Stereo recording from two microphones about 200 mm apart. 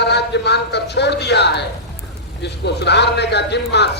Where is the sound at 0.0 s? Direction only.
60° left (ahead or behind).